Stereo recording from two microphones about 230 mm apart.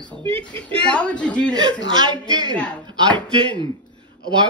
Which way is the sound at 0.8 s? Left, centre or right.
Centre.